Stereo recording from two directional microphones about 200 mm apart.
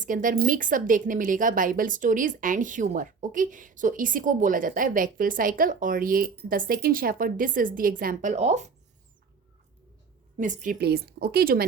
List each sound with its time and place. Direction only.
0.0 s a woman's voice: 40° right (ahead or behind)
10.3 s a woman's voice: 40° right (ahead or behind)